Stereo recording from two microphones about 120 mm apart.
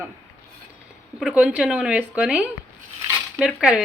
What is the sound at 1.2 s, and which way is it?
Speech, 5° right (ahead or behind).